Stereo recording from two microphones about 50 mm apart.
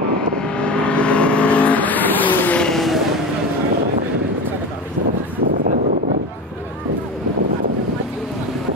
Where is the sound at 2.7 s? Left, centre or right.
Centre.